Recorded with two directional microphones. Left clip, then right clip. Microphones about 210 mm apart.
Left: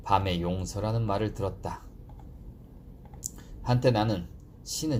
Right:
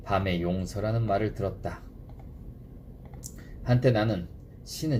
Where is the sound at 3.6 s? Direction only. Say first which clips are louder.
Even; 50° left (ahead or behind).